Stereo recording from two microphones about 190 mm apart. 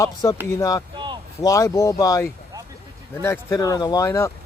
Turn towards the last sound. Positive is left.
turn(degrees=15)  # may be behind; listen again after turning